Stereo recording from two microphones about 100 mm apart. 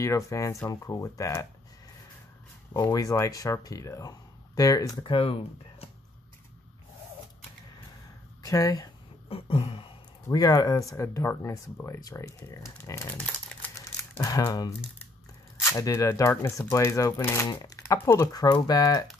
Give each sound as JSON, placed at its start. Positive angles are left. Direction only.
{"t": 0.0, "sound": "speech", "side_deg": 30}
{"t": 2.7, "sound": "speech", "side_deg": 40}
{"t": 5.0, "sound": "speech", "side_deg": 60}
{"t": 8.4, "sound": "speech", "side_deg": 35}
{"t": 9.3, "sound": "a sound", "side_deg": 75}
{"t": 10.2, "sound": "speech", "side_deg": 35}
{"t": 13.5, "sound": "crumpling", "side_deg": 15}
{"t": 14.1, "sound": "speech", "side_deg": 35}
{"t": 15.7, "sound": "speech", "side_deg": 35}